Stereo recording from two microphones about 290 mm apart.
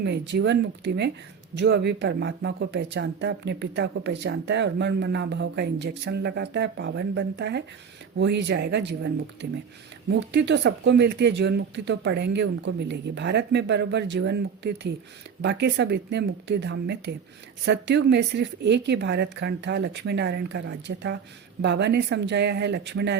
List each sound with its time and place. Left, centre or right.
0.0 s speech: right